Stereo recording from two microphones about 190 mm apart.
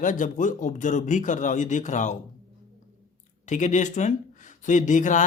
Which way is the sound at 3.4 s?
40° left (ahead or behind).